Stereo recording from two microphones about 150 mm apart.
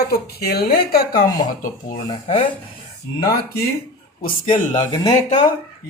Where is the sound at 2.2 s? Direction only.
45° left (ahead or behind).